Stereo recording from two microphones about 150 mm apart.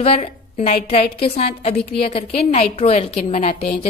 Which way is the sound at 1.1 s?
90° left.